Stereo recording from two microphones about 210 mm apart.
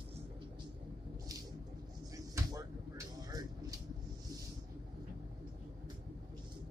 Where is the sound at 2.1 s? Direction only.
15° right (ahead or behind).